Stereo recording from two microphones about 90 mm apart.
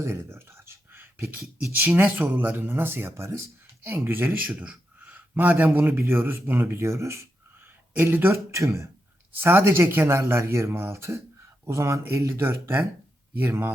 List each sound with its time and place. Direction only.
0.0 s a sound: 30° right (ahead or behind)
2.0 s speech: 20° right (ahead or behind)
4.4 s speech: 10° right (ahead or behind); by 13.7 s 25° right (ahead or behind)